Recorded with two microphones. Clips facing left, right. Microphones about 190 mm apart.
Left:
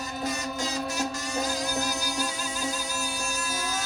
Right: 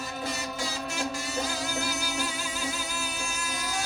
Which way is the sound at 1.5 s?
40° left (ahead or behind).